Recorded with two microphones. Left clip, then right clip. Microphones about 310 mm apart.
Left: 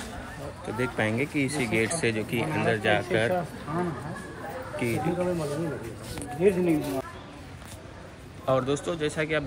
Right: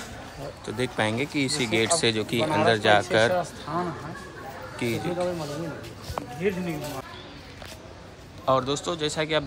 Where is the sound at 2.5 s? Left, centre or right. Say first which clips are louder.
Right 5 dB; right.